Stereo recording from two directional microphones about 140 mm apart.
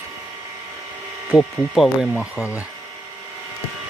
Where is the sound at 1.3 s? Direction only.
Centre (ahead or behind).